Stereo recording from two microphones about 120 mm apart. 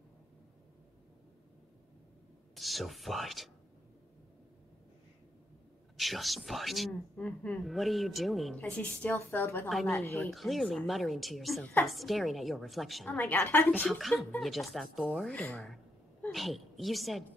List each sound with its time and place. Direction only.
2.5 s speech: centre (ahead or behind)
5.9 s speech: centre (ahead or behind)
8.5 s a woman's voice: 15° left (ahead or behind)
9.7 s speech: centre (ahead or behind)
9.9 s speech: 20° left (ahead or behind)
10.2 s speech: centre (ahead or behind)
13.8 s a woman's voice: centre (ahead or behind)